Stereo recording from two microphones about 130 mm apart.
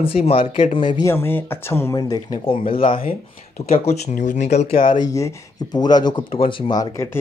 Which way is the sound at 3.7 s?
55° left (ahead or behind).